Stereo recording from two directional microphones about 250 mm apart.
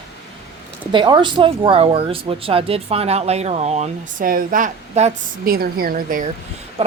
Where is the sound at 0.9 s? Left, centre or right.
Centre.